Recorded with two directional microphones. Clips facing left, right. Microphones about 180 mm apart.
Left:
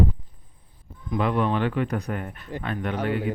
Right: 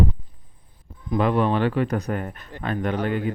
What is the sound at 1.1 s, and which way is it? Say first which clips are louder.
Speech: right 3 dB; 35° right (ahead or behind).